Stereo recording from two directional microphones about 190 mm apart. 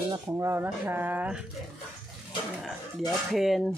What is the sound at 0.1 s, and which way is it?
Speech, 15° right (ahead or behind).